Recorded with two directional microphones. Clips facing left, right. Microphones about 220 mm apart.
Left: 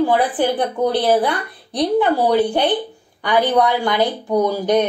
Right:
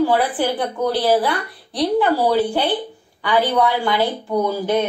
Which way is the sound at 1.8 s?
20° left (ahead or behind).